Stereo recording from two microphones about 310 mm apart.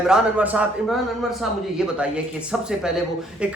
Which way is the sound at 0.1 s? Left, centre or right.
Centre.